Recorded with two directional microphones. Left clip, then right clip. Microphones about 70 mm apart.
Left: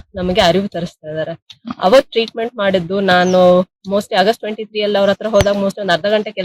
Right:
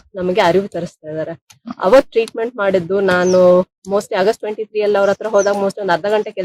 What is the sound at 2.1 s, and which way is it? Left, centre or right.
Speech, right.